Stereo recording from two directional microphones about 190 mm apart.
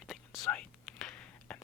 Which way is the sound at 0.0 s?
Centre (ahead or behind).